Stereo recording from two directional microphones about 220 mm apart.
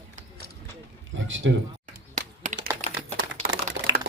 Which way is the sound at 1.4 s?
55° right (ahead or behind).